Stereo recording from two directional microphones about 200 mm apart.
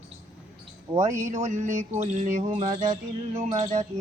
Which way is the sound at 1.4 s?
35° right (ahead or behind).